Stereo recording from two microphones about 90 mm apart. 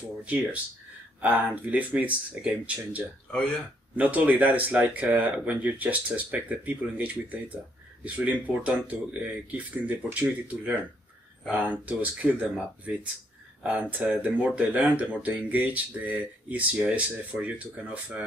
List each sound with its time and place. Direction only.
0.2 s speech: 15° right (ahead or behind)
3.3 s speech: 10° left (ahead or behind)
3.9 s speech: 15° right (ahead or behind)